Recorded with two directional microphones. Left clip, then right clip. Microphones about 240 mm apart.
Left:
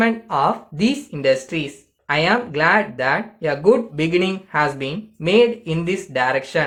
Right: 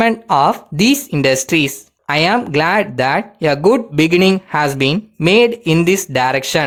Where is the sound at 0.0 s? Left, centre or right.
Right.